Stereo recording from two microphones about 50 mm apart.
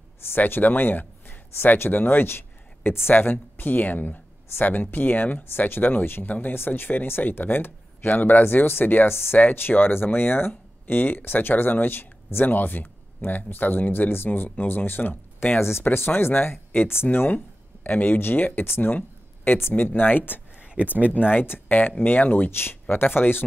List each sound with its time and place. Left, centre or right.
0.3 s speech: left
20.5 s a sound: right
21.3 s speech: left